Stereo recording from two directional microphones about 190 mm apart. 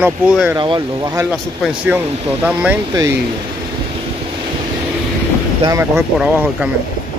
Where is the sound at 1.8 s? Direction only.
10° right (ahead or behind).